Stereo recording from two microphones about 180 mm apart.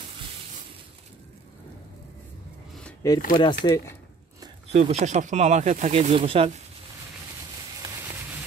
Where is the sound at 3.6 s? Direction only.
20° left (ahead or behind).